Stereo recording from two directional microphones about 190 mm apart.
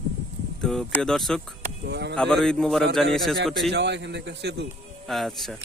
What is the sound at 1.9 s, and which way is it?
Speech, 65° right (ahead or behind).